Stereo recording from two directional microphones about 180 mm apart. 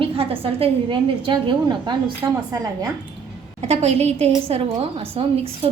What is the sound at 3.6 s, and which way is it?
A woman's voice, 35° right (ahead or behind).